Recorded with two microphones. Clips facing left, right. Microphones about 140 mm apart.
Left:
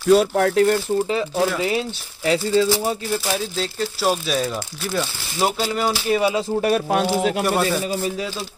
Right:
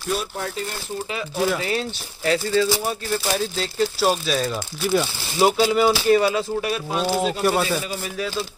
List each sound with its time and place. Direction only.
0.1 s speech: 90° left; by 0.7 s 70° left (ahead or behind)
1.6 s speech: 15° left (ahead or behind)
3.3 s speech: 5° right (ahead or behind)
6.6 s speech: 55° left (ahead or behind)
7.4 s speech: centre (ahead or behind)